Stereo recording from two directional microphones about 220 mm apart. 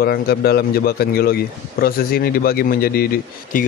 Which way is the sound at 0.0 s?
45° left (ahead or behind).